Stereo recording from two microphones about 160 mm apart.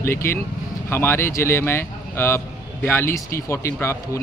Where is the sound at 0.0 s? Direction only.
15° left (ahead or behind).